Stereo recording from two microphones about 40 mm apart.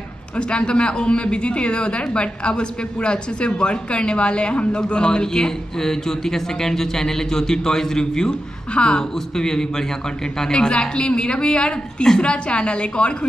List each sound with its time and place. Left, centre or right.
0.4 s speech: left